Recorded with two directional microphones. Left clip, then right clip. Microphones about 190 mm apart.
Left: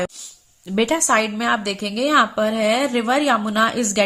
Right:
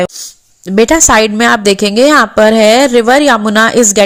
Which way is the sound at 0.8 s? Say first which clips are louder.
Right 11 dB; 35° right (ahead or behind).